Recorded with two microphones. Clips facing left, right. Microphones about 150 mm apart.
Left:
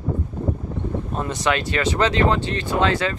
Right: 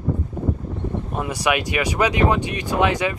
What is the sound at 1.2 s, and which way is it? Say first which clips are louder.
Speech: right 1 dB; 10° right (ahead or behind).